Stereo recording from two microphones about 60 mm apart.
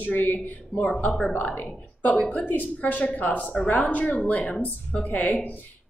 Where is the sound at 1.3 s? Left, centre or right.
Left.